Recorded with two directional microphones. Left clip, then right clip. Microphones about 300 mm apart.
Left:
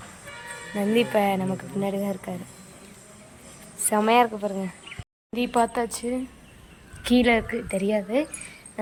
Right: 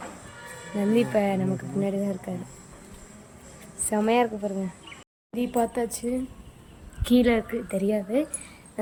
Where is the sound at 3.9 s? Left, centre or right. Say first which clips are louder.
Left 4 dB; centre.